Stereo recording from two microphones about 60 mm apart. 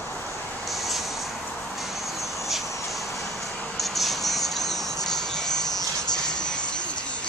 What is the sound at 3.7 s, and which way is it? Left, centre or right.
Music, centre.